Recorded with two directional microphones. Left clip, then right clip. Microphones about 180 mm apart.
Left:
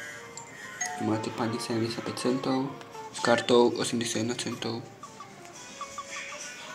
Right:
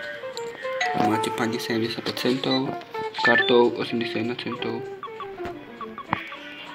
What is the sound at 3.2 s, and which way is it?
Speech, 5° left (ahead or behind).